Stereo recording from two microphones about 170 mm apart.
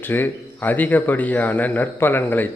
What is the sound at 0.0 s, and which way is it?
A man's voice, 10° left (ahead or behind).